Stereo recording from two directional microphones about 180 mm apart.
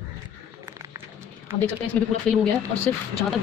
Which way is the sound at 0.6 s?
20° right (ahead or behind).